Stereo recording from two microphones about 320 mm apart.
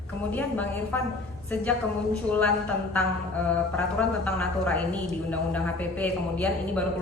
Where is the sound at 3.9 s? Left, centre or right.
Centre.